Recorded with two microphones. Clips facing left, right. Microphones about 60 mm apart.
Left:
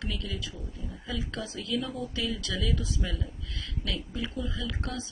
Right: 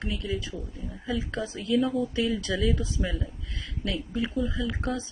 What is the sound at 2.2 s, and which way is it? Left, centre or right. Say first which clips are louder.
Speech: right 6 dB; right.